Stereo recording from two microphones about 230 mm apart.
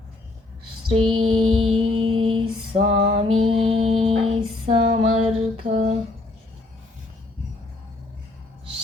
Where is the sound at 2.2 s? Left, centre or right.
Right.